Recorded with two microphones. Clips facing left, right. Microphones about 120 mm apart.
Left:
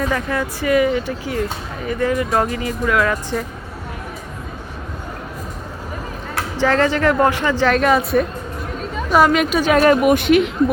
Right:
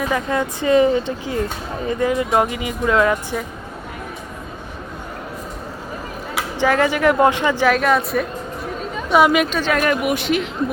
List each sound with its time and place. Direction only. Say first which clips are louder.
0.1 s speech: right 1 dB; 20° right (ahead or behind)
6.3 s speech: left 1 dB; 15° right (ahead or behind)
8.8 s chatter: even; centre (ahead or behind)
9.2 s speech: even; 5° right (ahead or behind)
9.5 s speech: left 4 dB; 10° left (ahead or behind)
9.7 s speech: left 8 dB; 35° left (ahead or behind)
10.2 s speech: left 6 dB; 60° left (ahead or behind)